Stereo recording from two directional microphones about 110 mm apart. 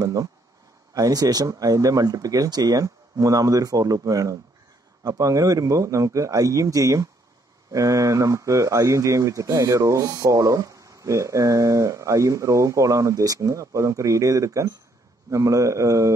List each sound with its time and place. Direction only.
0.0 s a man's voice: 30° right (ahead or behind)